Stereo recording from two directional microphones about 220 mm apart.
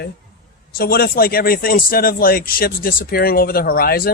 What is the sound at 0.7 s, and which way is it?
Speech, 45° left (ahead or behind).